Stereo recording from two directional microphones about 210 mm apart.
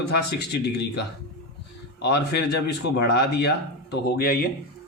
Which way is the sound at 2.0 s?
50° left (ahead or behind).